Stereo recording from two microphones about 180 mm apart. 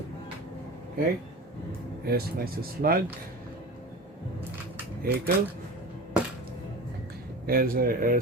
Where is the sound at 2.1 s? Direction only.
55° right (ahead or behind).